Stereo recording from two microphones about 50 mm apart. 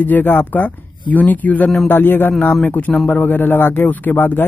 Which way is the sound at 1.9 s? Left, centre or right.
Left.